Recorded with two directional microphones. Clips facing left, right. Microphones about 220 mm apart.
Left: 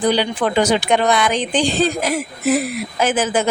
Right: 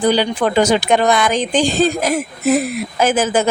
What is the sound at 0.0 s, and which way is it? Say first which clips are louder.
Speech: right 2 dB; 45° right (ahead or behind).